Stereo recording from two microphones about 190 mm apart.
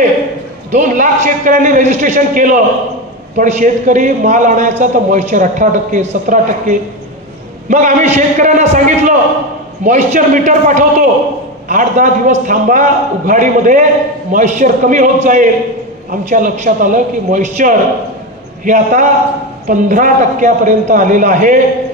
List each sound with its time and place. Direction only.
0.7 s a man's voice: 40° right (ahead or behind)